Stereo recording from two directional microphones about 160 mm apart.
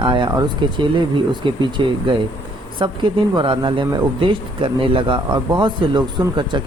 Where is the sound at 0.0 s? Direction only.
30° right (ahead or behind).